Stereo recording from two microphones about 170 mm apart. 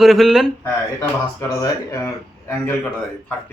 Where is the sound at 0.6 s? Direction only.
15° left (ahead or behind).